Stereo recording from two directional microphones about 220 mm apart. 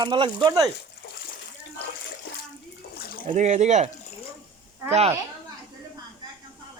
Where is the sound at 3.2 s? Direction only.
35° right (ahead or behind).